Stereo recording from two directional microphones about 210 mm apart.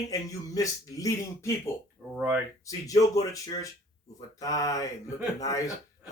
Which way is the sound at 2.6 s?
15° left (ahead or behind).